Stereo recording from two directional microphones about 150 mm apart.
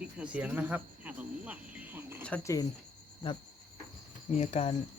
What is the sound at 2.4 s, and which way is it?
Speech, 20° left (ahead or behind).